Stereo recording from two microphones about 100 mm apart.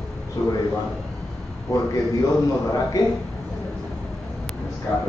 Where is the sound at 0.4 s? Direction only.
40° left (ahead or behind).